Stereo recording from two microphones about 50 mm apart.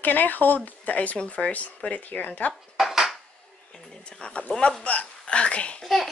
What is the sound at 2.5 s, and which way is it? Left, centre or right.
Dishes, centre.